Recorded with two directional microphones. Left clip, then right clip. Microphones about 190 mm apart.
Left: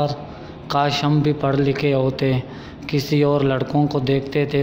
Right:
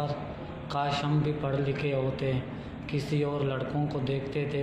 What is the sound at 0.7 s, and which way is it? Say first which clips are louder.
Speech: left 11 dB; 55° left (ahead or behind).